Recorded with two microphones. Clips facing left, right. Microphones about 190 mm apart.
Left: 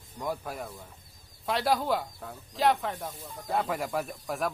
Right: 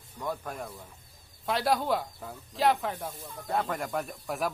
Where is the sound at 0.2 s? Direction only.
10° left (ahead or behind).